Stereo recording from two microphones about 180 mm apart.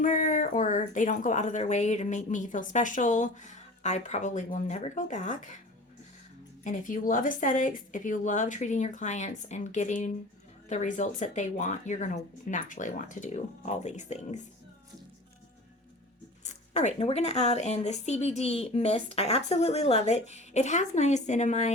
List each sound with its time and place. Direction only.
0.0 s speech: 45° left (ahead or behind)
6.7 s speech: 50° left (ahead or behind)
16.4 s speech: 40° left (ahead or behind)